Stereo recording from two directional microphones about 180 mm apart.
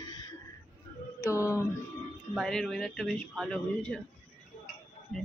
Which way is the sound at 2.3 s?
Centre (ahead or behind).